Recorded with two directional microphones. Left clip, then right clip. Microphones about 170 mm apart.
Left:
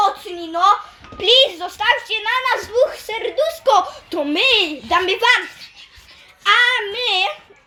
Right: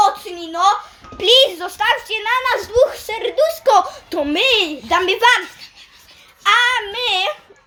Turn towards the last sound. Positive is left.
turn(degrees=-5)  # may be behind; listen again after turning